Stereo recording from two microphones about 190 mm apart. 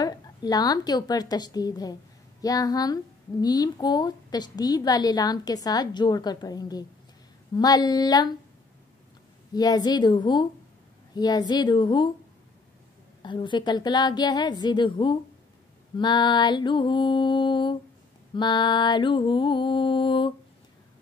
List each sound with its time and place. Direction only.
0.0 s a woman's voice: 20° left (ahead or behind)
9.5 s speech: 20° left (ahead or behind)
13.2 s speech: 25° left (ahead or behind)